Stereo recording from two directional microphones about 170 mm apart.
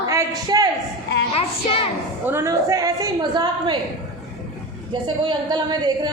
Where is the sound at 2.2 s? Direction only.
15° right (ahead or behind).